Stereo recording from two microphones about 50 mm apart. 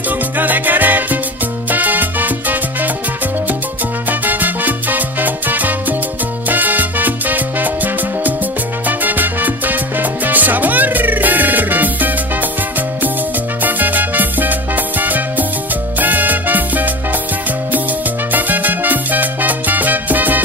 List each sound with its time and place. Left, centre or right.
0.4 s music: right
4.1 s salsa music: right
13.6 s salsa music: right
15.0 s music: right
18.3 s salsa music: right